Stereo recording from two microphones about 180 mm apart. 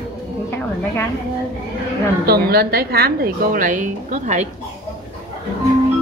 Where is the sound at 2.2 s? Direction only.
60° right (ahead or behind); by 4.5 s 40° right (ahead or behind).